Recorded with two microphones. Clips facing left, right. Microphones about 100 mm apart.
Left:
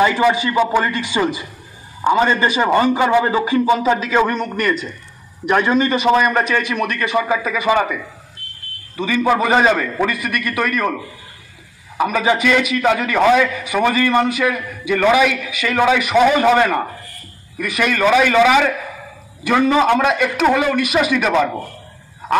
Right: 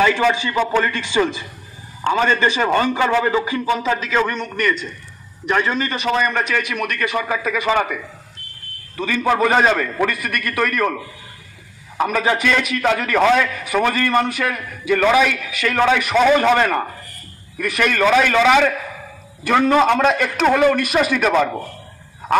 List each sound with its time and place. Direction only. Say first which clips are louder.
0.0 s a man's voice: left 2 dB; 15° left (ahead or behind)
6.5 s speech: left 3 dB; 30° left (ahead or behind)
7.2 s a man's voice: left 5 dB; 15° left (ahead or behind)
8.9 s a man's voice: left 2 dB; 10° left (ahead or behind)
12.0 s a man's voice: left 2 dB; 15° left (ahead or behind)